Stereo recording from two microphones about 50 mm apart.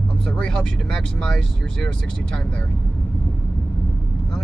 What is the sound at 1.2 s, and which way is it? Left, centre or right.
Speech, centre.